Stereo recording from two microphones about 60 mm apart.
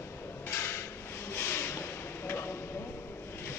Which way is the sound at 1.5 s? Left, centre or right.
Left.